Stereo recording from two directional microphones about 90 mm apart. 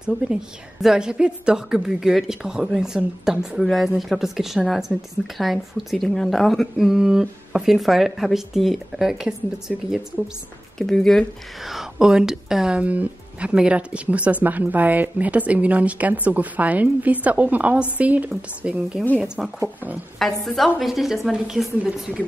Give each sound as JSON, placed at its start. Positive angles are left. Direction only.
{"t": 0.0, "sound": "a woman's voice", "side_deg": -5}
{"t": 10.8, "sound": "a woman's voice", "side_deg": 5}
{"t": 20.2, "sound": "a woman's voice", "side_deg": 0}